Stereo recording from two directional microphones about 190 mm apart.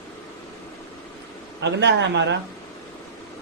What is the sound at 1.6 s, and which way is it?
Speech, 65° right (ahead or behind).